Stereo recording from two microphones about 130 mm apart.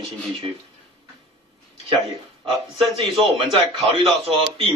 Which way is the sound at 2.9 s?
45° right (ahead or behind).